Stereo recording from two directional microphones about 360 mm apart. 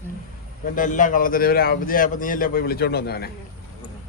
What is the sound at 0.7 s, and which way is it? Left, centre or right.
A man's voice, left.